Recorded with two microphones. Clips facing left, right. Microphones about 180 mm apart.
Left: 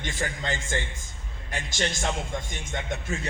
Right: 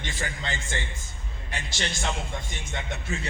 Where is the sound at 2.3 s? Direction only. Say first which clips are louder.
Left 2 dB; 45° left (ahead or behind).